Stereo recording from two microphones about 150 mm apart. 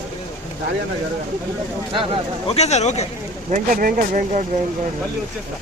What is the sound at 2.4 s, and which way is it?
Speech, 45° left (ahead or behind).